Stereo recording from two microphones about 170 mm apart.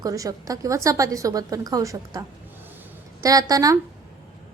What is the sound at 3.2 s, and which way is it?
Speech, 20° right (ahead or behind).